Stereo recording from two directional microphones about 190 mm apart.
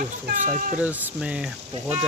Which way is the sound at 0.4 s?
45° right (ahead or behind).